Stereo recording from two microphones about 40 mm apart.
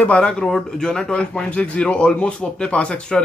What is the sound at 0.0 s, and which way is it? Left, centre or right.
A man's voice, left.